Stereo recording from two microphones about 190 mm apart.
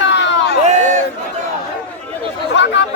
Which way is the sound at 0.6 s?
40° right (ahead or behind).